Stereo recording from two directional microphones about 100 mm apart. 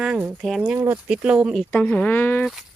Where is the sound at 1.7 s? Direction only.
15° left (ahead or behind).